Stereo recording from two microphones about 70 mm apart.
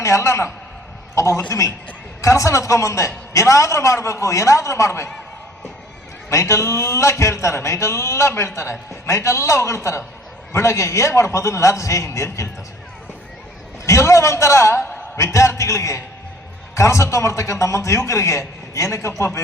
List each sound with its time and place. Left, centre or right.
0.0 s a man's voice: left
6.3 s a man's voice: left
13.8 s a man's voice: left